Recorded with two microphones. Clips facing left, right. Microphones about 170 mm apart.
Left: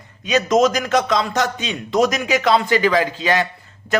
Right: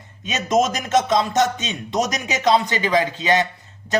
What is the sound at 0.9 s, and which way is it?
A man's voice, 20° right (ahead or behind).